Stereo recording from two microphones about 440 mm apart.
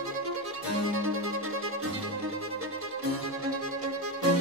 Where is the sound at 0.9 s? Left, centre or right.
Right.